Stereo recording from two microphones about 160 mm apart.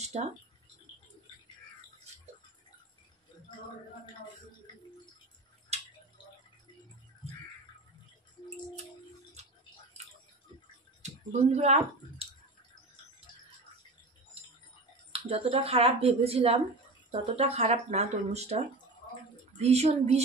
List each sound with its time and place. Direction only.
0.0 s a sound: 45° right (ahead or behind)
11.5 s speech: 40° right (ahead or behind)
15.1 s speech: 35° right (ahead or behind)
19.6 s speech: 40° right (ahead or behind)